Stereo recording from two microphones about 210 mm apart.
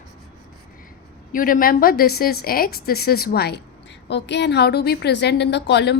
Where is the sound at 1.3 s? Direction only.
40° left (ahead or behind).